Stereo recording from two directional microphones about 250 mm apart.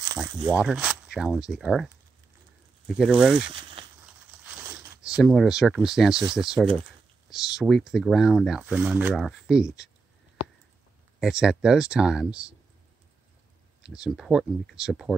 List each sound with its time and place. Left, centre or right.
0.0 s a sound: centre
0.6 s speech: centre
3.0 s speech: centre
3.3 s speech: right
4.0 s a sound: centre
6.3 s speech: centre
11.1 s speech: centre
13.8 s speech: centre